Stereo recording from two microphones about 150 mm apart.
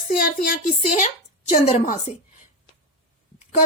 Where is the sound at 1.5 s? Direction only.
55° left (ahead or behind).